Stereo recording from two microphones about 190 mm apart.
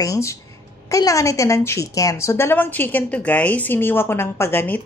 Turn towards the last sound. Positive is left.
turn(degrees=10)  # may be behind; listen again after turning